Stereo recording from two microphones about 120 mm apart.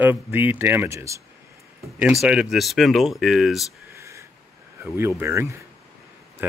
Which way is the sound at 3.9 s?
25° right (ahead or behind).